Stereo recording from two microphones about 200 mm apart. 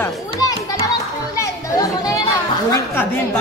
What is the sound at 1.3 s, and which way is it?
Children playing, 15° left (ahead or behind).